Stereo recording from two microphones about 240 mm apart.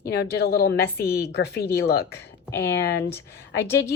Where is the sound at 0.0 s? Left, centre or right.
Left.